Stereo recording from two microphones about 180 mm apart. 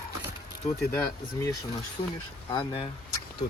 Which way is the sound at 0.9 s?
15° left (ahead or behind).